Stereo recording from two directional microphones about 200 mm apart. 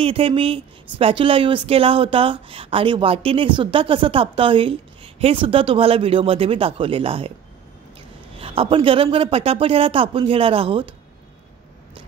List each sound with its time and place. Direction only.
0.0 s speech: 30° right (ahead or behind)
8.4 s speech: 30° right (ahead or behind)